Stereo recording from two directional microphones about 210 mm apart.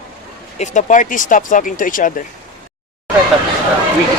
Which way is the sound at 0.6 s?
35° left (ahead or behind).